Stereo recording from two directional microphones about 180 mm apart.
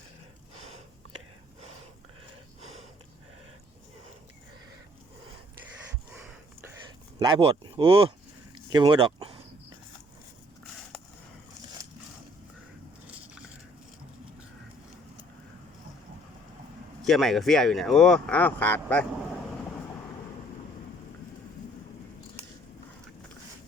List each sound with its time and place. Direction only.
7.2 s speech: 25° right (ahead or behind)
13.1 s biting: 5° right (ahead or behind)
17.0 s speech: centre (ahead or behind)
22.4 s biting: 15° right (ahead or behind)